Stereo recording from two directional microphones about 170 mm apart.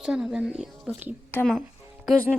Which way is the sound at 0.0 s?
5° right (ahead or behind).